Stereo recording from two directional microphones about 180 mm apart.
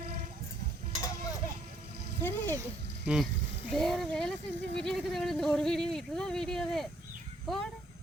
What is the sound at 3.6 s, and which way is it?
Speech, centre (ahead or behind).